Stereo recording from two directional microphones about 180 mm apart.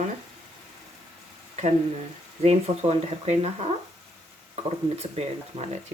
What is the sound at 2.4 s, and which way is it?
Speech, 35° right (ahead or behind).